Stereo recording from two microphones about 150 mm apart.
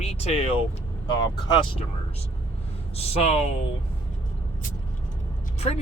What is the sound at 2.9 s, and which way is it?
Speech, 40° left (ahead or behind).